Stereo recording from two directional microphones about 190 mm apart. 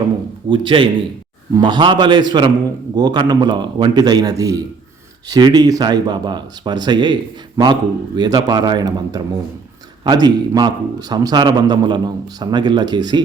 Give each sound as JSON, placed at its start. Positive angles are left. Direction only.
{"t": 0.5, "sound": "speech", "side_deg": -25}